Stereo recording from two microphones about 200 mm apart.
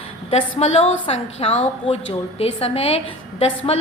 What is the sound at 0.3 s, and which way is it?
A woman's voice, 30° left (ahead or behind).